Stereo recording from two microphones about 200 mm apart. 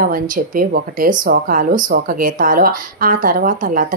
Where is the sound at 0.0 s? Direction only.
45° right (ahead or behind).